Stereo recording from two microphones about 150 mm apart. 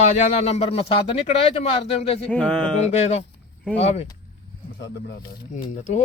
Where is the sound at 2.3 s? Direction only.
10° left (ahead or behind).